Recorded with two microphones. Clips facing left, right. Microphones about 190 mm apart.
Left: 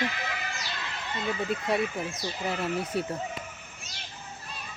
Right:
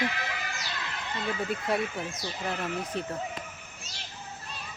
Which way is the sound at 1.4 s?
Centre (ahead or behind).